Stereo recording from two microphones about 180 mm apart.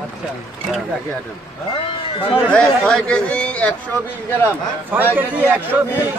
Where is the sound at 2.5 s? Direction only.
5° left (ahead or behind).